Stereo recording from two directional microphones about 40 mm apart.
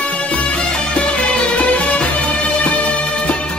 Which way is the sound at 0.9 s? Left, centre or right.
Left.